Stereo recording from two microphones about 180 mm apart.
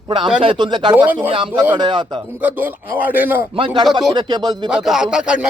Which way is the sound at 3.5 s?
30° right (ahead or behind).